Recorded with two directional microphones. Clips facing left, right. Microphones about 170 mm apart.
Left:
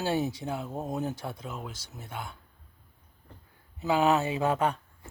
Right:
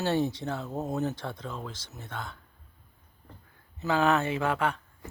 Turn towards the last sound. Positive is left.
turn(degrees=20)  # may be behind; listen again after turning